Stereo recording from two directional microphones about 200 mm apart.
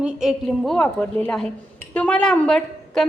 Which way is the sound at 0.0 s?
Centre (ahead or behind).